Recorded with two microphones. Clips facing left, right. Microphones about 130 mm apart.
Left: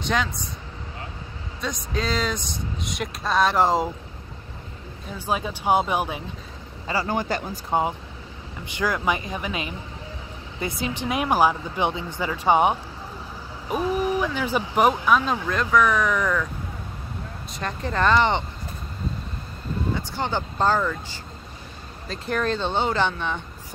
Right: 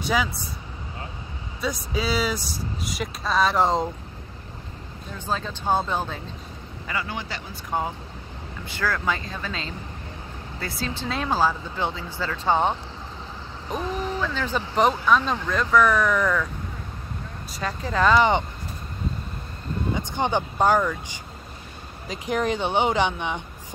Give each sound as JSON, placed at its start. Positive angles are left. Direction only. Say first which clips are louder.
{"t": 0.0, "sound": "speech", "louder": "right 1 dB", "side_deg": -5}
{"t": 1.6, "sound": "speech", "louder": "right 1 dB", "side_deg": -5}
{"t": 5.1, "sound": "speech", "louder": "left 2 dB", "side_deg": 10}
{"t": 6.9, "sound": "a man's voice", "louder": "left 6 dB", "side_deg": 40}
{"t": 7.7, "sound": "speech", "louder": "left 4 dB", "side_deg": 20}
{"t": 17.6, "sound": "speech", "louder": "right 1 dB", "side_deg": -5}
{"t": 19.9, "sound": "speech", "louder": "right 3 dB", "side_deg": -20}
{"t": 22.0, "sound": "speech", "louder": "right 1 dB", "side_deg": -15}